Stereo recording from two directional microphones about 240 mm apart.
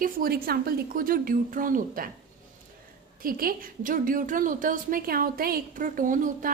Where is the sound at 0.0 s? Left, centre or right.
Right.